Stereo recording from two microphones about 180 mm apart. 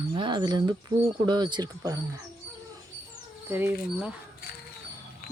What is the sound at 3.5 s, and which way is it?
Speech, 10° right (ahead or behind).